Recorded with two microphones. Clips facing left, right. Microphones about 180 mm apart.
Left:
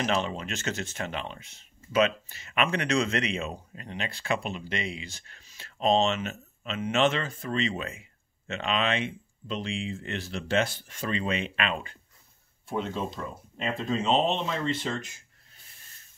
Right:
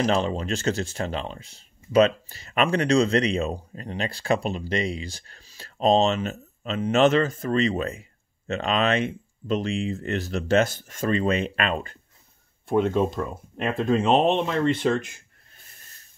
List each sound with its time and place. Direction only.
0.0 s speech: 35° right (ahead or behind)
12.6 s speech: 55° right (ahead or behind)